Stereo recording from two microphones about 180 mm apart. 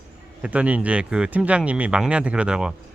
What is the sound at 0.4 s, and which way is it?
Speech, 5° right (ahead or behind).